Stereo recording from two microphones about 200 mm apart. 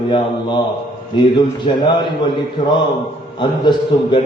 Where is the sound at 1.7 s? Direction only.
25° left (ahead or behind).